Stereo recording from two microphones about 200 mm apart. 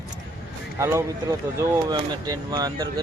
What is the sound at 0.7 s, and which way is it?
Speech, 15° right (ahead or behind).